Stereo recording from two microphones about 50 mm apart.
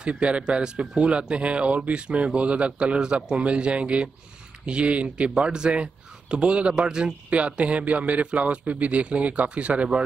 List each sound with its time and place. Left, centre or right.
0.0 s speech: right